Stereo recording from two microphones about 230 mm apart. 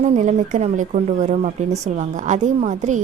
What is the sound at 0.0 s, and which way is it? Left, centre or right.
Speech, right.